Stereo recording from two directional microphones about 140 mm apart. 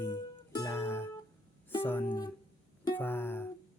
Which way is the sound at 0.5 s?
20° left (ahead or behind).